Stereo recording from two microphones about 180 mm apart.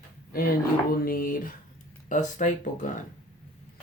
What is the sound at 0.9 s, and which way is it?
Speech, 55° left (ahead or behind).